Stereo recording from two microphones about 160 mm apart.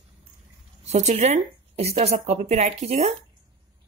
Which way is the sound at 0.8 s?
45° right (ahead or behind).